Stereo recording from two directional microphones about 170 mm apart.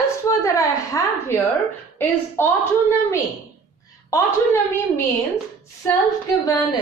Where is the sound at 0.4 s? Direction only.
20° left (ahead or behind).